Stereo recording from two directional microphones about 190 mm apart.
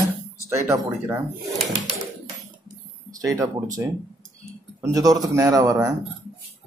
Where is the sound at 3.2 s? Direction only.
20° right (ahead or behind).